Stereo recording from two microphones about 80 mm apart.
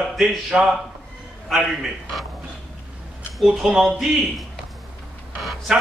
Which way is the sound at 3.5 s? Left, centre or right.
Centre.